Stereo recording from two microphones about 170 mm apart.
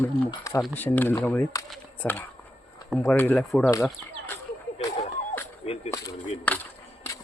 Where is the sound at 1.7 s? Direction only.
10° left (ahead or behind).